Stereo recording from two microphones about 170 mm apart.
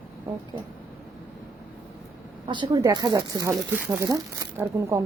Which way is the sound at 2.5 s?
25° right (ahead or behind).